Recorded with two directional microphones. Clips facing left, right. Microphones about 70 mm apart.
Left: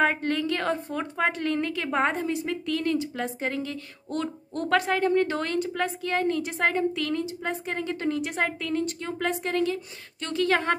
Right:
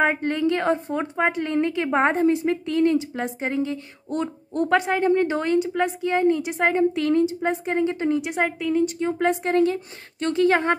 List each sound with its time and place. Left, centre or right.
0.0 s a woman's voice: centre
9.2 s a woman's voice: right